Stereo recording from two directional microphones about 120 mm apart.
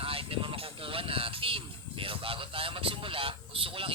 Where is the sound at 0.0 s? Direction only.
50° right (ahead or behind).